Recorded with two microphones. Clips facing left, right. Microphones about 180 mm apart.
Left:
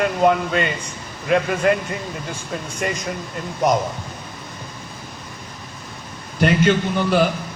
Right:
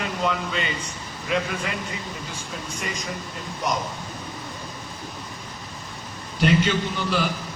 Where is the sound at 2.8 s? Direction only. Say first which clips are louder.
Left 9 dB; 55° left (ahead or behind).